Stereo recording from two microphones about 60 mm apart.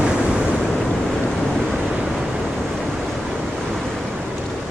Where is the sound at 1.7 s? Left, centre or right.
Centre.